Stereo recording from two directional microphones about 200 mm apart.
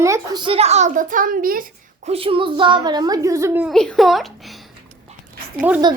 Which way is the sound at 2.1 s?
30° right (ahead or behind).